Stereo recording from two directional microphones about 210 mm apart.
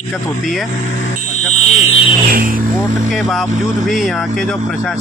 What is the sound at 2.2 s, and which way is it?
Speech, 40° right (ahead or behind).